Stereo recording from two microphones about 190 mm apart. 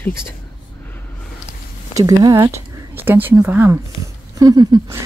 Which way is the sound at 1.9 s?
20° right (ahead or behind).